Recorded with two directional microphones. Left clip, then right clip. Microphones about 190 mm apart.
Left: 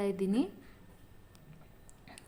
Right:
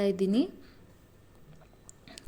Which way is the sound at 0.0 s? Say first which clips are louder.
Right 5 dB; 15° right (ahead or behind).